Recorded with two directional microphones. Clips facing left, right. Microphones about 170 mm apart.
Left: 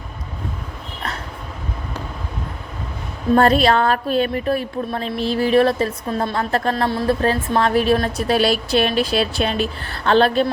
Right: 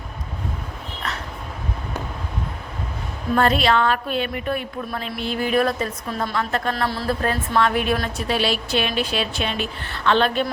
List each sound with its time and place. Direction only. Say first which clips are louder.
3.3 s a woman's voice: left 4 dB; 40° left (ahead or behind)